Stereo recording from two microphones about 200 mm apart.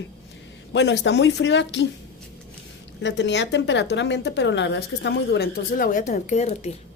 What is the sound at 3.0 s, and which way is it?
A woman's voice, 65° left (ahead or behind).